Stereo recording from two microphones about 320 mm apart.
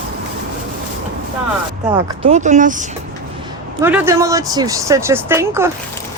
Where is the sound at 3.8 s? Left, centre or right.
Centre.